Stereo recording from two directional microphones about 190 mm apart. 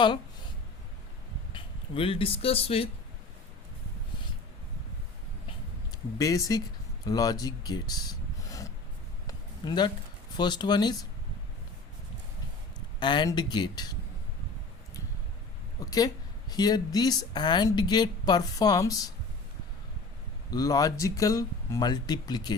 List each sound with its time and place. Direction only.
1.5 s speech: 30° left (ahead or behind)
5.9 s speech: 20° left (ahead or behind)
9.2 s a sound: 25° left (ahead or behind)
10.3 s speech: 25° left (ahead or behind)
13.0 s speech: 25° left (ahead or behind)
15.9 s speech: 20° left (ahead or behind)
20.5 s speech: 20° left (ahead or behind)